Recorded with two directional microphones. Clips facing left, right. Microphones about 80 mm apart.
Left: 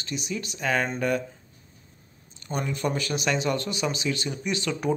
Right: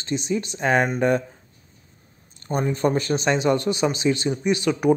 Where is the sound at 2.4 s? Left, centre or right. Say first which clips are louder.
Right 7 dB; right.